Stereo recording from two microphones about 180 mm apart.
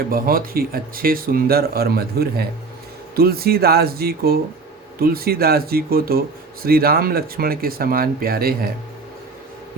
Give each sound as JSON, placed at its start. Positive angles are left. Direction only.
{"t": 0.1, "sound": "speech", "side_deg": -55}